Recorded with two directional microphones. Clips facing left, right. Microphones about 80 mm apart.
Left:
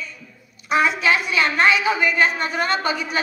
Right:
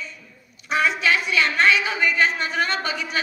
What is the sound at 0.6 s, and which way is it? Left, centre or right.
A woman's voice, centre.